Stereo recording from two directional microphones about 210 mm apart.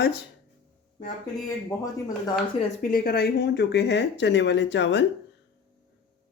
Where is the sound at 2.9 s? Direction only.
45° left (ahead or behind).